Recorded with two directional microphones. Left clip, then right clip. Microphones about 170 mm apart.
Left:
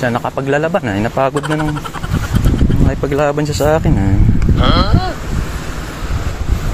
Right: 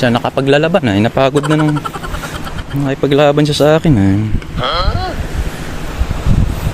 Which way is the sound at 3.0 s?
55° right (ahead or behind).